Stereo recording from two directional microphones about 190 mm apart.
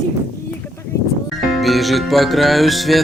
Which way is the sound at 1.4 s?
Centre (ahead or behind).